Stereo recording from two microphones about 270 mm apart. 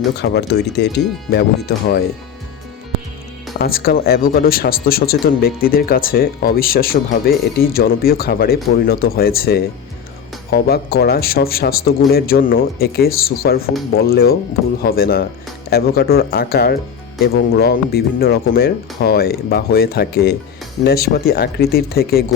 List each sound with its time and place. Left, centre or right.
0.2 s speech: left
3.6 s speech: left